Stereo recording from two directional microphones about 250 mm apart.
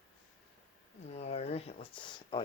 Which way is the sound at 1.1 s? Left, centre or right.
Left.